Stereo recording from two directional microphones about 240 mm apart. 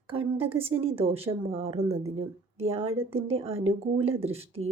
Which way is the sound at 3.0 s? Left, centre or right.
Right.